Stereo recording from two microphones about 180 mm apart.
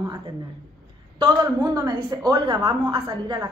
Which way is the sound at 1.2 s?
20° right (ahead or behind).